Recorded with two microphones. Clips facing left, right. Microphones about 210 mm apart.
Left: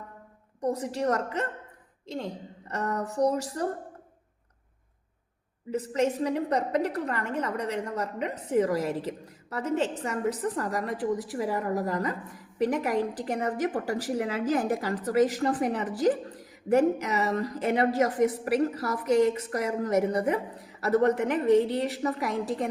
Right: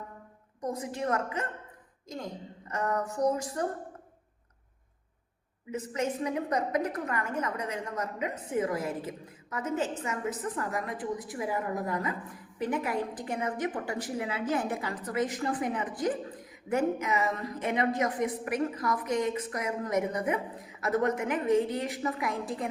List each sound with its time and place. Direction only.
0.6 s a woman's voice: 35° left (ahead or behind)
5.7 s a woman's voice: 35° left (ahead or behind)